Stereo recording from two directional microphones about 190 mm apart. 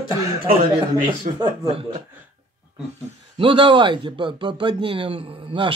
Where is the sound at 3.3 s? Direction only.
25° right (ahead or behind).